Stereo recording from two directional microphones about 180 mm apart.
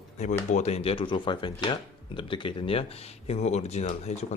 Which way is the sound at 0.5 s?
35° left (ahead or behind).